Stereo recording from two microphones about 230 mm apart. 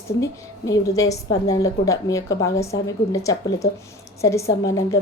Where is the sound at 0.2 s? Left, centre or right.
Centre.